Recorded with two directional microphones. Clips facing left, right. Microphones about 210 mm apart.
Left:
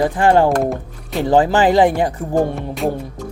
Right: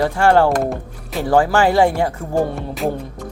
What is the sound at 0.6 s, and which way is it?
Music, centre (ahead or behind).